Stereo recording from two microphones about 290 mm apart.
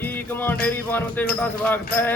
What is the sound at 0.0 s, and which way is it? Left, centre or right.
A man's voice, centre.